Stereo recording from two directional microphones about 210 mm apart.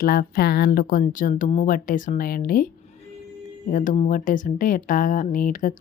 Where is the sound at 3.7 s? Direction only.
40° left (ahead or behind).